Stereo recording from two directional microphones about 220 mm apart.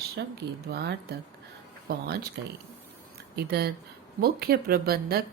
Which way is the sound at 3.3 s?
45° right (ahead or behind).